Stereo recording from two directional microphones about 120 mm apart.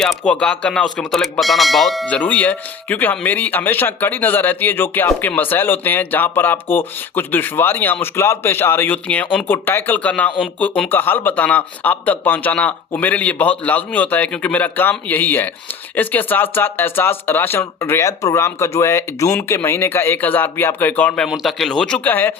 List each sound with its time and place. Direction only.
0.0 s speech: 5° left (ahead or behind)
2.1 s speech: 10° left (ahead or behind)
21.2 s speech: centre (ahead or behind); by 22.4 s 15° left (ahead or behind)